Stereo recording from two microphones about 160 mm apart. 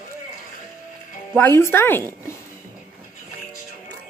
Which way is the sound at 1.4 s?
15° left (ahead or behind).